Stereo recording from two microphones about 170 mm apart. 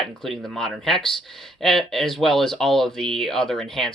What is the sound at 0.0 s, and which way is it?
Speech, centre (ahead or behind).